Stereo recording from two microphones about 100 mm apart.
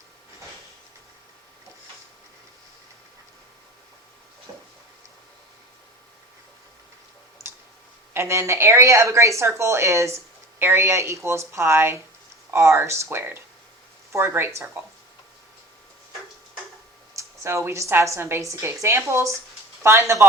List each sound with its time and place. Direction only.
8.1 s a woman's voice: 25° right (ahead or behind)
17.2 s a woman's voice: 30° right (ahead or behind)